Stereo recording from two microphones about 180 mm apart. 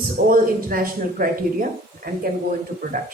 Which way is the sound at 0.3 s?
50° right (ahead or behind).